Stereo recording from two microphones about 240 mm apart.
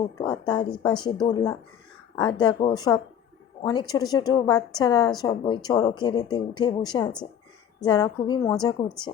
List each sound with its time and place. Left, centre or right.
0.2 s a woman's voice: centre